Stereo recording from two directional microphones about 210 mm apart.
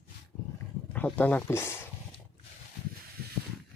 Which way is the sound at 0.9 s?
10° left (ahead or behind).